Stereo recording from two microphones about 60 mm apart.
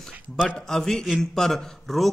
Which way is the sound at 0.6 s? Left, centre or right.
Centre.